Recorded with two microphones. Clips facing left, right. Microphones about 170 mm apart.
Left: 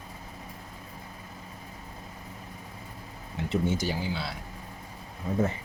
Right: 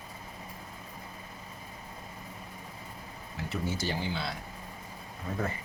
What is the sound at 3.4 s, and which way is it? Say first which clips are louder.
Speech: left 6 dB; 25° left (ahead or behind).